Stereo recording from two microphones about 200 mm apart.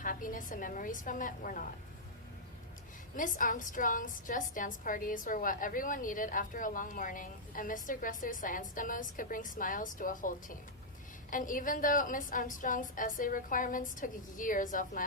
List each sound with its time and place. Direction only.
0.0 s a woman's voice: 40° left (ahead or behind)
3.2 s a woman's voice: 40° left (ahead or behind)